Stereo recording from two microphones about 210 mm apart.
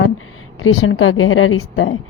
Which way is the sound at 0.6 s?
75° left (ahead or behind).